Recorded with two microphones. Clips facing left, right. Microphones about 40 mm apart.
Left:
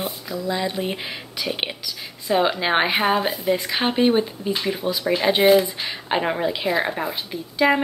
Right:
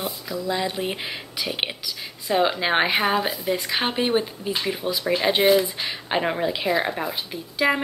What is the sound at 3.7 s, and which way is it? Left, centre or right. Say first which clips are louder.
Speech: left 3 dB; centre.